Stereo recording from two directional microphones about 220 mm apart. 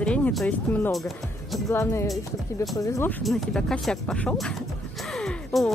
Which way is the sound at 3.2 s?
Centre (ahead or behind).